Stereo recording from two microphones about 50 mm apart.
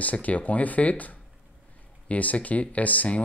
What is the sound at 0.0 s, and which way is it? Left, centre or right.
Speech, left.